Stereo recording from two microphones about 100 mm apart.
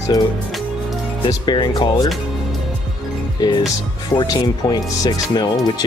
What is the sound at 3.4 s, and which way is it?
Speech, 40° left (ahead or behind).